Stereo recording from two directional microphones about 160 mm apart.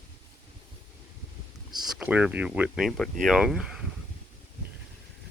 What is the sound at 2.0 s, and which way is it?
Speech, 10° right (ahead or behind).